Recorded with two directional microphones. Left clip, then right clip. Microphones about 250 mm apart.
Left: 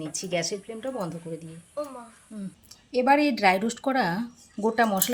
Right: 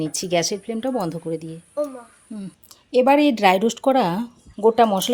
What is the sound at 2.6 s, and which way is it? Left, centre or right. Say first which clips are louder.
Speech: right 6 dB; right.